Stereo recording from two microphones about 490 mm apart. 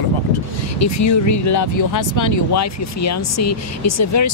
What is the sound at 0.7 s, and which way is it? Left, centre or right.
Speech, left.